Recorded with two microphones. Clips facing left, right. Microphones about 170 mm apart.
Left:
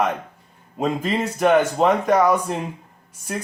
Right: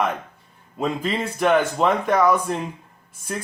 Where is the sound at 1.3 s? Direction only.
40° left (ahead or behind).